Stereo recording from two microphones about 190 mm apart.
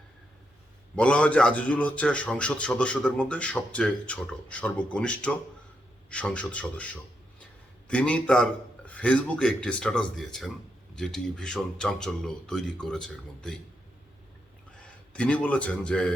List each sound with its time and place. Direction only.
0.9 s a man's voice: 5° left (ahead or behind)
15.1 s a man's voice: 5° left (ahead or behind)